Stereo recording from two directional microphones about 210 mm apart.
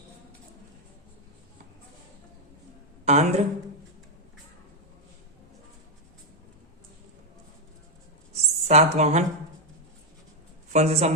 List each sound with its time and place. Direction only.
3.0 s a woman's voice: 30° right (ahead or behind)
8.3 s a sound: 30° right (ahead or behind)
10.7 s a man's voice: 30° right (ahead or behind)